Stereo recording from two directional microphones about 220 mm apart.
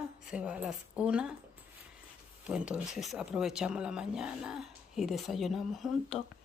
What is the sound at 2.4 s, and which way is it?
Speech, 5° right (ahead or behind).